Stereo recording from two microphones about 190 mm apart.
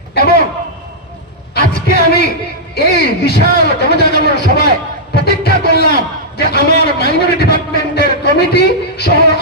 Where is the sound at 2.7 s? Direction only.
55° left (ahead or behind).